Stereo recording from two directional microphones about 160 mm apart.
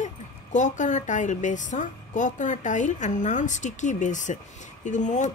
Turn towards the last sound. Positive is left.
turn(degrees=50)  # may be behind; listen again after turning